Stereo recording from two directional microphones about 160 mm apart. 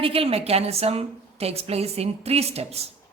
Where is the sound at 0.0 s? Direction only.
35° right (ahead or behind).